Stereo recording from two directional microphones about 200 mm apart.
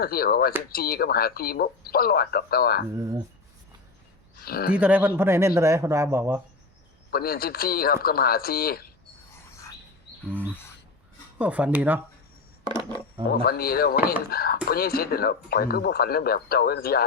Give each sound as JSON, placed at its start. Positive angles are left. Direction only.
{"t": 0.0, "sound": "speech", "side_deg": 50}
{"t": 4.4, "sound": "speech", "side_deg": 50}
{"t": 4.7, "sound": "a man's voice", "side_deg": -5}
{"t": 7.1, "sound": "speech", "side_deg": 50}
{"t": 10.2, "sound": "a sound", "side_deg": -10}
{"t": 11.3, "sound": "a man's voice", "side_deg": -5}
{"t": 12.6, "sound": "a sound", "side_deg": -20}
{"t": 13.3, "sound": "speech", "side_deg": 50}